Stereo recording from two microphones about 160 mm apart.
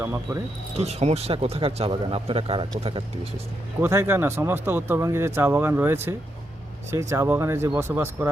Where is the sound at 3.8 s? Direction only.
15° right (ahead or behind).